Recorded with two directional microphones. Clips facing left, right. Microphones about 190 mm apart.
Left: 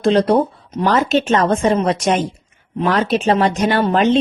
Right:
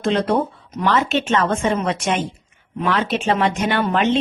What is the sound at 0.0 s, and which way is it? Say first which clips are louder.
Speech: left 5 dB; 35° left (ahead or behind).